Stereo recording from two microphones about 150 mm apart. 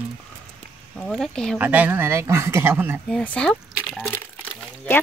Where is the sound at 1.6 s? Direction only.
10° right (ahead or behind).